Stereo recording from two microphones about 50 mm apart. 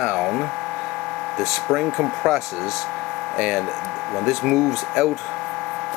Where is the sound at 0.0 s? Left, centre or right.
Centre.